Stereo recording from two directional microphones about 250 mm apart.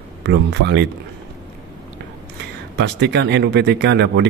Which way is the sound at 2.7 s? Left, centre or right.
Right.